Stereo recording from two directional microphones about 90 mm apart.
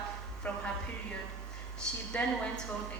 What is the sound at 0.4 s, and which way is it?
Speech, 15° left (ahead or behind).